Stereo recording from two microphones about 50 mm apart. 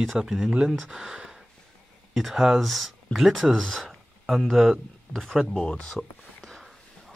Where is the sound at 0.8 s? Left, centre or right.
Centre.